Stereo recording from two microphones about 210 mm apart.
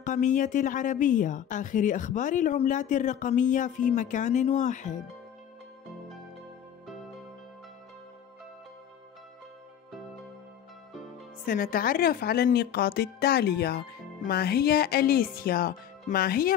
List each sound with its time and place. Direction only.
0.0 s a woman's voice: 35° left (ahead or behind)
11.4 s speech: 40° left (ahead or behind)